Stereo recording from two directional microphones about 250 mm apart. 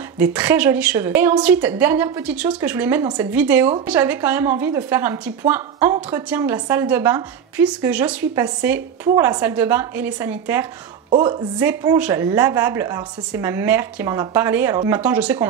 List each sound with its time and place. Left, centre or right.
0.2 s a woman's voice: centre
11.1 s a woman's voice: centre